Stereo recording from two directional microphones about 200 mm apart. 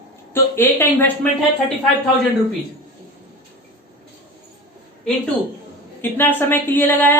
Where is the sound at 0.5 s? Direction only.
10° left (ahead or behind).